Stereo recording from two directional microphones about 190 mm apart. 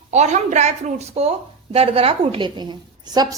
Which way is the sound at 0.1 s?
35° right (ahead or behind).